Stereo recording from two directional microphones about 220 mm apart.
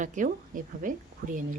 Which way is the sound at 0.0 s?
35° right (ahead or behind).